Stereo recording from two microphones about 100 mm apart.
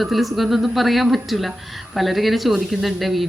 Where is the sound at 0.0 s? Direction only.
Centre (ahead or behind).